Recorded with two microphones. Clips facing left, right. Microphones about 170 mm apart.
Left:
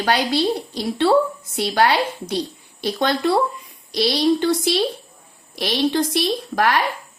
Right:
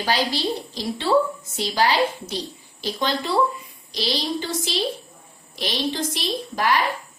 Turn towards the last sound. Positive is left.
turn(degrees=65)  # may be behind; listen again after turning